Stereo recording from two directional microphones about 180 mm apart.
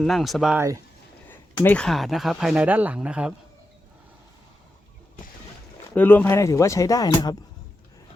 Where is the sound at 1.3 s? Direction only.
10° left (ahead or behind); by 3.3 s 5° right (ahead or behind).